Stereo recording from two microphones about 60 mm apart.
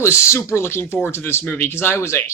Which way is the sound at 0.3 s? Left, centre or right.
Left.